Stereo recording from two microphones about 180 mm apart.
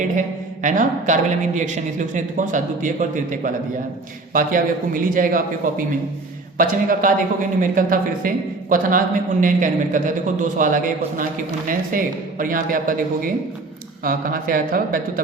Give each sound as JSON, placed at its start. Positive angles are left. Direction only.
{"t": 0.2, "sound": "a woman's voice", "side_deg": -45}